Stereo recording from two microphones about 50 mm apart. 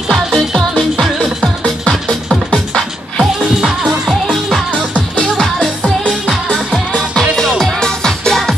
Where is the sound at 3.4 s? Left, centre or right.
Centre.